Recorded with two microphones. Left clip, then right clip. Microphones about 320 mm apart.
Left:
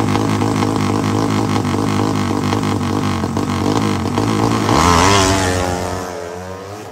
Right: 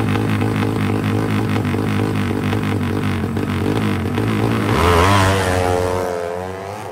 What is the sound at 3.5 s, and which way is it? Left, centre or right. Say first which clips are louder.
Music: left 3 dB; left.